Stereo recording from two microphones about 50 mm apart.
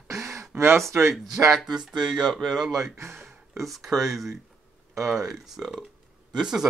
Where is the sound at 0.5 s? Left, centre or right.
Right.